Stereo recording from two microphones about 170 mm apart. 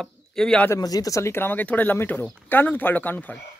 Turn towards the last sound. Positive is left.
turn(degrees=10)  # may be behind; listen again after turning